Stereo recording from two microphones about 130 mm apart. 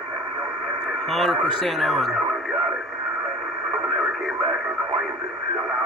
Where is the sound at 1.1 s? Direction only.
Centre (ahead or behind).